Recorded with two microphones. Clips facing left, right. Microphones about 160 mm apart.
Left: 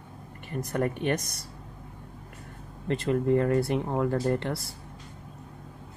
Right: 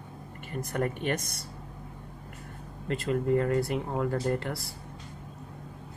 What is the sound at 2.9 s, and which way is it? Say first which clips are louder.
Speech: left 2 dB; 25° left (ahead or behind).